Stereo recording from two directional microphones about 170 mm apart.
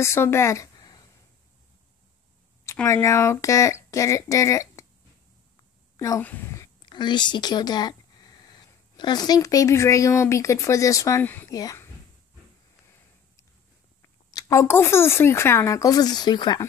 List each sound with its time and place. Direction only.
0.0 s a woman's voice: 15° left (ahead or behind)
2.6 s speech: 15° left (ahead or behind)
5.9 s a woman's voice: 15° left (ahead or behind)
6.9 s speech: 25° left (ahead or behind)
14.0 s speech: 20° left (ahead or behind)